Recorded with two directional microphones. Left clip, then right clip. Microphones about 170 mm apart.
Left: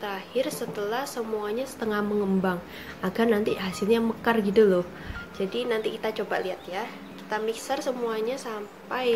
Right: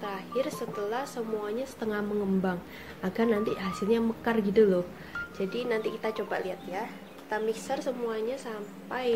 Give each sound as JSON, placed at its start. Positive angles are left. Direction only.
{"t": 0.0, "sound": "a woman's voice", "side_deg": 0}
{"t": 6.8, "sound": "a sound", "side_deg": -20}
{"t": 7.6, "sound": "a woman's voice", "side_deg": 0}